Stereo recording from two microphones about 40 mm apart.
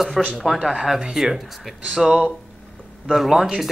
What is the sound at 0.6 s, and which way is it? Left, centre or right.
Speech, centre.